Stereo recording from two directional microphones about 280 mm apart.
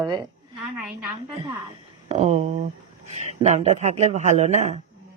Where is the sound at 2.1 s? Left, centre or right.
Right.